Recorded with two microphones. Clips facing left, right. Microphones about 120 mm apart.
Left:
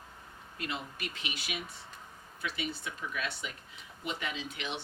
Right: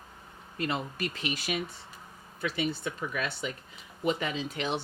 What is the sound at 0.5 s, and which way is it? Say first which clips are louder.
Speech: right 7 dB; 40° right (ahead or behind).